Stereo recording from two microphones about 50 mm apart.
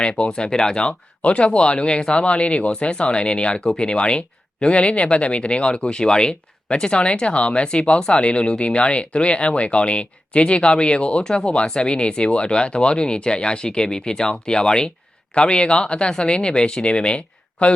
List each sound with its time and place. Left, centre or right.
0.0 s speech: centre